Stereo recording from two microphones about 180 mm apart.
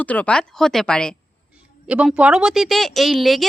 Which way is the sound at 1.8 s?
5° right (ahead or behind).